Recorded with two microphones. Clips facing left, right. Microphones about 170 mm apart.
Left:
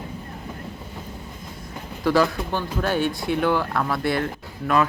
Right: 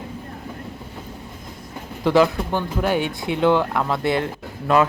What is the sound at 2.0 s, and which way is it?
A man's voice, 20° right (ahead or behind).